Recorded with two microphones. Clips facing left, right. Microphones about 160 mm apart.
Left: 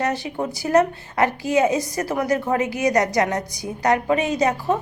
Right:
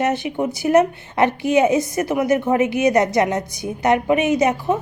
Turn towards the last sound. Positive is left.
turn(degrees=-20)  # may be behind; listen again after turning